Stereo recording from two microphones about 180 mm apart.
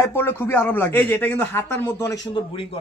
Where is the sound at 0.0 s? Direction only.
10° left (ahead or behind).